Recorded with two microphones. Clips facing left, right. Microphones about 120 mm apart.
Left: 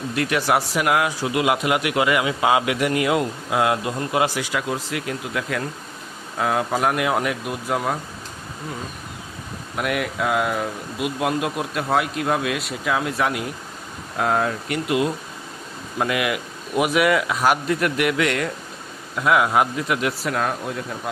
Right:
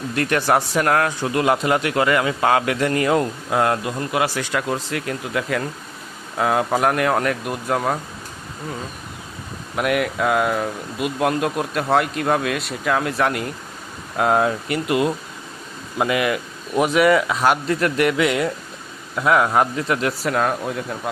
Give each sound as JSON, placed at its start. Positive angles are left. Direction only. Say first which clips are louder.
{"t": 0.2, "sound": "speech", "louder": "right 2 dB", "side_deg": 5}
{"t": 3.8, "sound": "speech", "louder": "even", "side_deg": 25}
{"t": 4.4, "sound": "speech", "louder": "right 2 dB", "side_deg": 5}
{"t": 9.7, "sound": "speech", "louder": "right 4 dB", "side_deg": 0}